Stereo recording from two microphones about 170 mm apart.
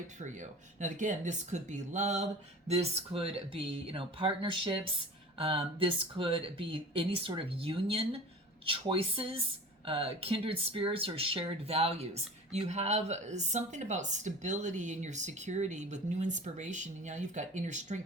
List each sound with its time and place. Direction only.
0.2 s speech: 45° right (ahead or behind)